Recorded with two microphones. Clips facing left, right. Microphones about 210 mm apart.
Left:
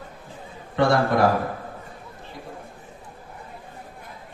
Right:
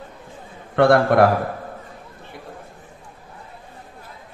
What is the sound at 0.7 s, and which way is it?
Speech, 60° right (ahead or behind).